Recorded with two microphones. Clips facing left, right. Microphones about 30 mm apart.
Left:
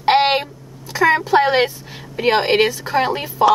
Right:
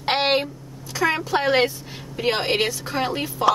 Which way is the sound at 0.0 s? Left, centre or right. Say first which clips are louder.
Left 8 dB; centre.